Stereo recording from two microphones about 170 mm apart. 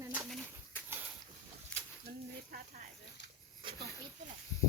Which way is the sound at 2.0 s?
55° right (ahead or behind).